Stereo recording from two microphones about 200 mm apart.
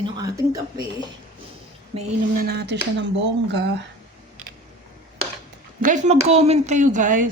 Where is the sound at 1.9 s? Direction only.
30° right (ahead or behind).